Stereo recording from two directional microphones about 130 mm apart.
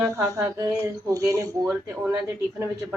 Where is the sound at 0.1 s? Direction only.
25° right (ahead or behind).